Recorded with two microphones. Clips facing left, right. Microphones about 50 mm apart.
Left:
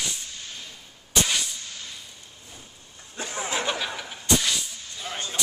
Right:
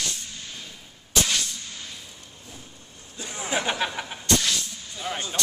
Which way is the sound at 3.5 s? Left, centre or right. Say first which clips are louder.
Right 3 dB; centre.